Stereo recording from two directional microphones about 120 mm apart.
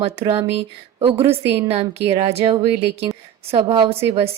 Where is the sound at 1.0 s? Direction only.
50° right (ahead or behind).